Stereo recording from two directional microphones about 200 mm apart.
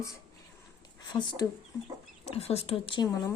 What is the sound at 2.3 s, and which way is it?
A woman's voice, 30° left (ahead or behind).